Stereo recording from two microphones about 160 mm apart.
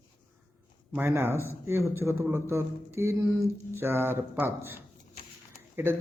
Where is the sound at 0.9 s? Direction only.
15° right (ahead or behind).